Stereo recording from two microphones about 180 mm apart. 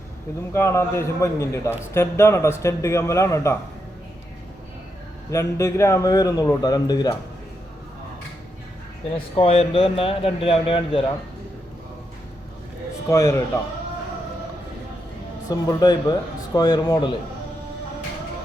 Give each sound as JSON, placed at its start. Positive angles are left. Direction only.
{"t": 0.5, "sound": "speech", "side_deg": 15}
{"t": 5.3, "sound": "a man's voice", "side_deg": 15}
{"t": 9.3, "sound": "speech", "side_deg": 30}
{"t": 13.1, "sound": "speech", "side_deg": 15}
{"t": 15.4, "sound": "a man's voice", "side_deg": 20}